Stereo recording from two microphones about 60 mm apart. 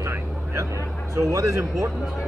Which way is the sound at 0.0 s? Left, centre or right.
Right.